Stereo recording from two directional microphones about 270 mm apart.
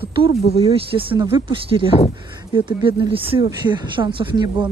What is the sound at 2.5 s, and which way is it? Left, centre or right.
Speech, centre.